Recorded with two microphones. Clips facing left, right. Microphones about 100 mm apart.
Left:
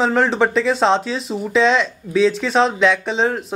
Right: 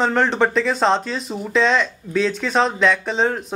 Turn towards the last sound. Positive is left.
turn(degrees=0)  # may be behind; listen again after turning